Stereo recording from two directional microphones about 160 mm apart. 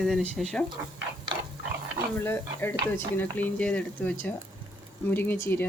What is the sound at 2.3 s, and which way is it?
Speech, 15° left (ahead or behind).